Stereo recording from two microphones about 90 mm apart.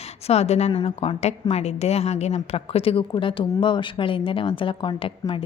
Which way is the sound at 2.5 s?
90° left.